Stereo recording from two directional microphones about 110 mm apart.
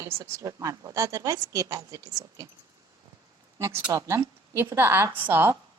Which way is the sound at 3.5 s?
25° right (ahead or behind).